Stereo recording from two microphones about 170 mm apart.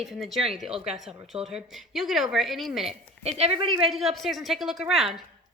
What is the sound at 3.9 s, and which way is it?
A woman's voice, centre (ahead or behind).